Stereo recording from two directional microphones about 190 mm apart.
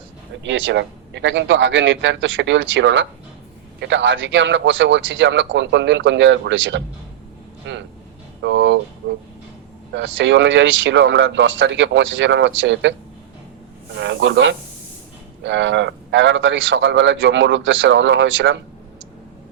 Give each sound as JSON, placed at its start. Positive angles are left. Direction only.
{"t": 0.4, "sound": "a man's voice", "side_deg": -75}
{"t": 9.9, "sound": "a man's voice", "side_deg": -75}
{"t": 14.0, "sound": "a man's voice", "side_deg": -70}